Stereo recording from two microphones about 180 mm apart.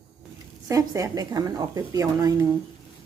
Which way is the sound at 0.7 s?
20° right (ahead or behind).